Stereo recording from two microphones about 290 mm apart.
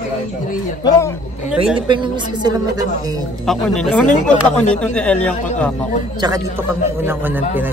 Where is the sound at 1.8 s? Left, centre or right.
Centre.